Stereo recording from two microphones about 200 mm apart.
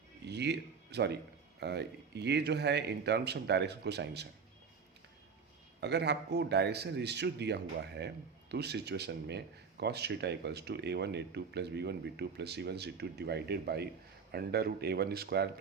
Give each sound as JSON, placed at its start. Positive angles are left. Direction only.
{"t": 0.3, "sound": "speech", "side_deg": -55}
{"t": 5.8, "sound": "speech", "side_deg": -55}